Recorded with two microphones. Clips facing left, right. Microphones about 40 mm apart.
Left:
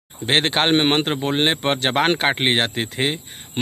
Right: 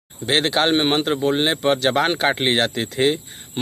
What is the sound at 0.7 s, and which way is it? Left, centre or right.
Speech, left.